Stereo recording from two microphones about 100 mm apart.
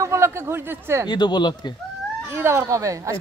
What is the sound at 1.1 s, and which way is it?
Speech, 50° left (ahead or behind).